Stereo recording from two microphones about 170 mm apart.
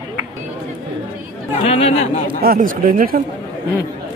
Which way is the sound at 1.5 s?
35° left (ahead or behind).